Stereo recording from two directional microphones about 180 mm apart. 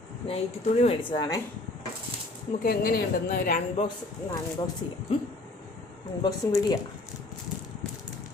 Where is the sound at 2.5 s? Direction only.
60° left (ahead or behind).